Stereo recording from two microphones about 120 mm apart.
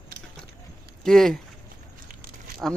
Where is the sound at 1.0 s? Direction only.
5° left (ahead or behind).